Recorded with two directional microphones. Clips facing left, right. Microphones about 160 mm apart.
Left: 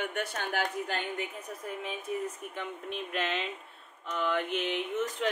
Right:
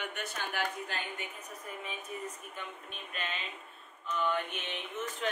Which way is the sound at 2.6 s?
90° left.